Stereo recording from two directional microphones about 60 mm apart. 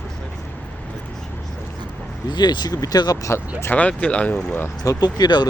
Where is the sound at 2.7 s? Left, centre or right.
Left.